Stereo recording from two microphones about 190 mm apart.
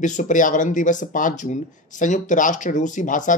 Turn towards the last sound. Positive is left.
turn(degrees=45)  # may be behind; listen again after turning